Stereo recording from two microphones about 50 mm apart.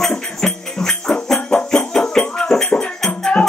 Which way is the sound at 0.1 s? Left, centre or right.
Centre.